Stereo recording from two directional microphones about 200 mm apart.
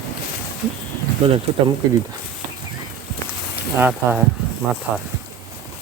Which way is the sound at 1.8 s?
20° right (ahead or behind).